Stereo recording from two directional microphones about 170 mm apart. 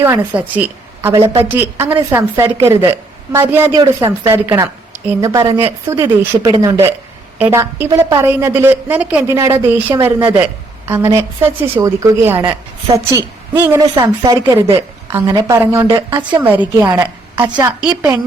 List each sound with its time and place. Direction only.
0.0 s a woman's voice: 10° right (ahead or behind)
17.3 s a woman's voice: 25° right (ahead or behind)